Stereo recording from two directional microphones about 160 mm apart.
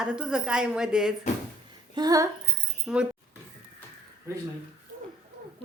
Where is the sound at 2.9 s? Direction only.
5° right (ahead or behind).